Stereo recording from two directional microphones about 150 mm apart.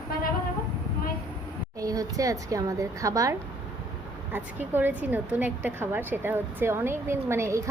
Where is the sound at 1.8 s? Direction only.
25° right (ahead or behind).